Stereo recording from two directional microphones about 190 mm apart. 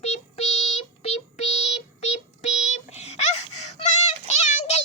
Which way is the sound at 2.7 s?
35° left (ahead or behind).